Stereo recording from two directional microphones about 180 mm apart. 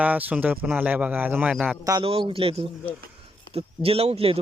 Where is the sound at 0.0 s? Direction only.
10° right (ahead or behind).